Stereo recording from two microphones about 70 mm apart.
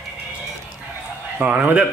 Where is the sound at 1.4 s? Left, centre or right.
Right.